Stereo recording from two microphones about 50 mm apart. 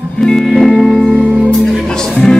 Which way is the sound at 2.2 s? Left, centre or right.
Centre.